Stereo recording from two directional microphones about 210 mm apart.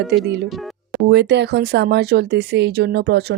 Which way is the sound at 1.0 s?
55° right (ahead or behind).